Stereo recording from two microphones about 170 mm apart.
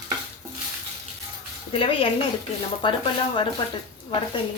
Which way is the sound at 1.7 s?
30° left (ahead or behind).